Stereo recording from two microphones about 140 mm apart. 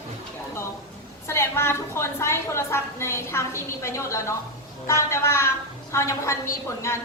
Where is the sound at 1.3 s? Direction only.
20° left (ahead or behind).